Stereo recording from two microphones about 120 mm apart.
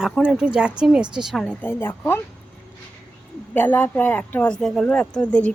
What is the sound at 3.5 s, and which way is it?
Speech, 15° left (ahead or behind).